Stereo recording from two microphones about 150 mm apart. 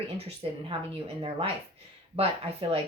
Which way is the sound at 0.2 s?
40° right (ahead or behind).